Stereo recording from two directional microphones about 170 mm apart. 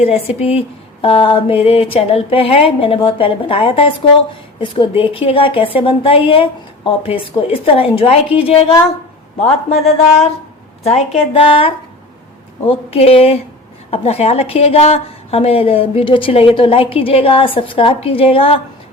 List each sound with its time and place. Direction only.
0.0 s a woman's voice: 35° left (ahead or behind)